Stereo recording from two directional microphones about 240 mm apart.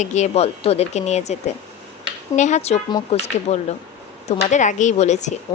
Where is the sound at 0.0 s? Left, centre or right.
Left.